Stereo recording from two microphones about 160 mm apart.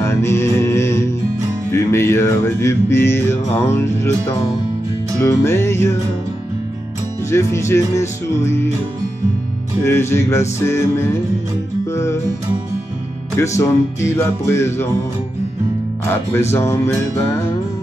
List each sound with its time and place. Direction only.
0.0 s music: 15° left (ahead or behind)
5.2 s music: 15° left (ahead or behind)
7.2 s music: 15° left (ahead or behind)
9.8 s music: 15° left (ahead or behind)
13.4 s music: 15° left (ahead or behind)
16.1 s music: 15° left (ahead or behind)